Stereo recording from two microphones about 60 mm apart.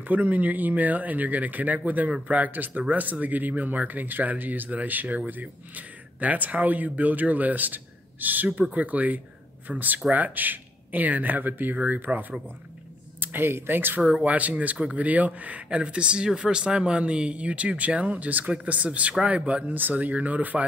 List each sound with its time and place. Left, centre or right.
0.0 s speech: right